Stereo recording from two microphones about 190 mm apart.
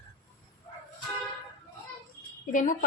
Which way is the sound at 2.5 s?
45° left (ahead or behind).